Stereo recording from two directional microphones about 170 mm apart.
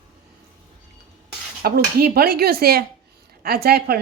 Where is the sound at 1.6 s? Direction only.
65° right (ahead or behind).